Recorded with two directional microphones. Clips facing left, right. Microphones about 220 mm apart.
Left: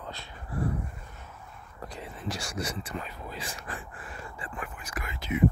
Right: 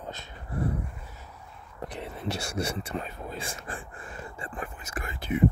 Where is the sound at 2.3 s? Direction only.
25° right (ahead or behind).